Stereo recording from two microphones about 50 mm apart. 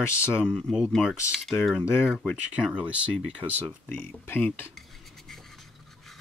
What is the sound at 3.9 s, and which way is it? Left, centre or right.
Speech, left.